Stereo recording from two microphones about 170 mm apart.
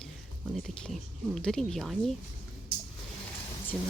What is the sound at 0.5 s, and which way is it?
Speech, centre (ahead or behind).